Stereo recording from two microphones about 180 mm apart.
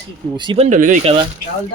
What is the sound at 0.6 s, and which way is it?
Speech, 45° right (ahead or behind).